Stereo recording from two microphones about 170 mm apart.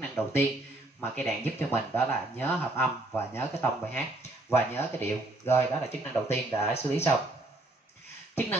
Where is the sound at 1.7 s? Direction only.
15° left (ahead or behind).